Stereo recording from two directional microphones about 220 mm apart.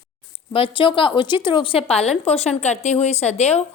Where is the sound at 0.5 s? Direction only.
25° left (ahead or behind).